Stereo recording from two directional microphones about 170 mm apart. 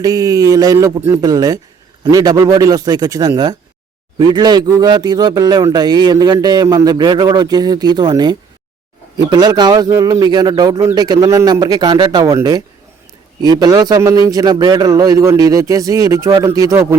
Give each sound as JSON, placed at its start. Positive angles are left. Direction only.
{"t": 0.0, "sound": "a man's voice", "side_deg": -20}